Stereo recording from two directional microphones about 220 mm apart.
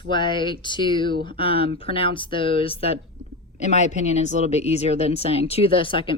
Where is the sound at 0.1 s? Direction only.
20° left (ahead or behind).